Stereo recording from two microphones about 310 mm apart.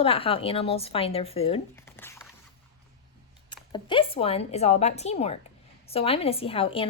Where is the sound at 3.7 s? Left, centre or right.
Centre.